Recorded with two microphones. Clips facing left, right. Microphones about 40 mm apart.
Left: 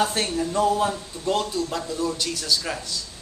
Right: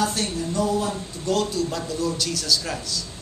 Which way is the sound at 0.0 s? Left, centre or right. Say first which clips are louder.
Left 1 dB; left.